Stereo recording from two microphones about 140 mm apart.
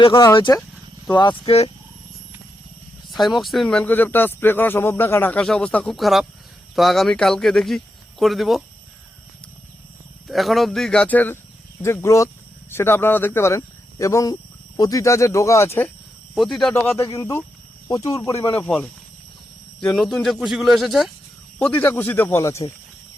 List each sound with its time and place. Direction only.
0.0 s speech: 35° left (ahead or behind)
3.1 s speech: centre (ahead or behind)
10.2 s speech: centre (ahead or behind); by 15.9 s 15° left (ahead or behind)
16.3 s speech: centre (ahead or behind)
16.9 s speech: 25° left (ahead or behind)
18.6 s speech: 10° left (ahead or behind)
20.0 s speech: centre (ahead or behind)
21.6 s speech: 15° left (ahead or behind)